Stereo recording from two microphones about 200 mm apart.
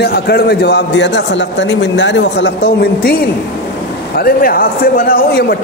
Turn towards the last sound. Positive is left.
turn(degrees=50)  # may be behind; listen again after turning